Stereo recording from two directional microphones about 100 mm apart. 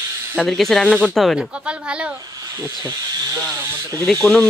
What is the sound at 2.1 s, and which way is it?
Snake, 35° right (ahead or behind).